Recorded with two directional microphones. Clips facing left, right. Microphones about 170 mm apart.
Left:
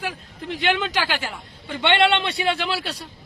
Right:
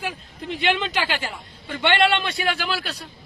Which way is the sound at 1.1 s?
15° left (ahead or behind).